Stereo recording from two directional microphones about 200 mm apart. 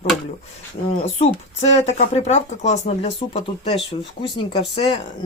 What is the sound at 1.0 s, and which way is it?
Speech, 35° left (ahead or behind).